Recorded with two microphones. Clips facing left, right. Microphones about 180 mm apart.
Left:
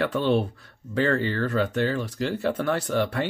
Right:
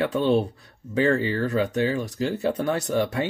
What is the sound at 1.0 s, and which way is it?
Speech, 10° right (ahead or behind).